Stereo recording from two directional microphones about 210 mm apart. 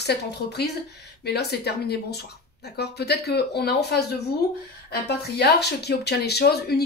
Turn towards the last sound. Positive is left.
turn(degrees=50)  # may be behind; listen again after turning